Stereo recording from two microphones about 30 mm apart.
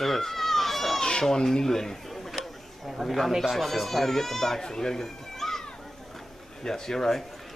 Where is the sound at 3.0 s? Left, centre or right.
Centre.